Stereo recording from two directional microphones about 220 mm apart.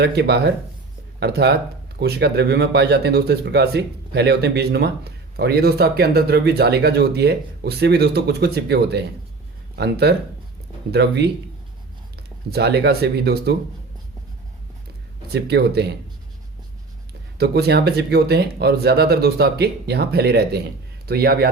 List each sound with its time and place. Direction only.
0.0 s speech: 50° right (ahead or behind)
12.5 s speech: 50° right (ahead or behind)
15.3 s speech: 50° right (ahead or behind)
17.3 s speech: 45° right (ahead or behind)